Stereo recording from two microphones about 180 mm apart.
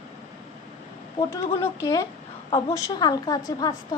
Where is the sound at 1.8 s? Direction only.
15° left (ahead or behind).